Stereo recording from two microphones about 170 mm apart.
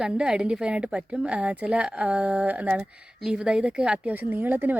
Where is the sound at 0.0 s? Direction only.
5° right (ahead or behind).